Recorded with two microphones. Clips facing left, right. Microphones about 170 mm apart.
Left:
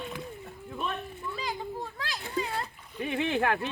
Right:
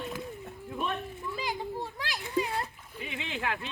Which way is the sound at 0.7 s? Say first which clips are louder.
Right 1 dB; centre (ahead or behind).